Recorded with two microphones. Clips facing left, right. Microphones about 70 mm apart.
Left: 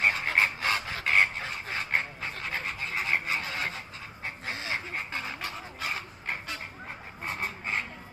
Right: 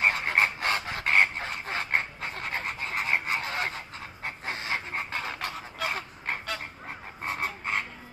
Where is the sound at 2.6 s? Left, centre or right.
Right.